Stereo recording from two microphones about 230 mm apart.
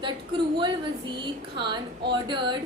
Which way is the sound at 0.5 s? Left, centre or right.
Centre.